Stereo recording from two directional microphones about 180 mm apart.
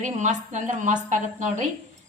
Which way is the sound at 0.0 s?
40° right (ahead or behind).